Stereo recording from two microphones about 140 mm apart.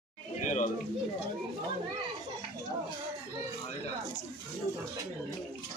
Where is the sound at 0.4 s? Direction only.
60° left (ahead or behind).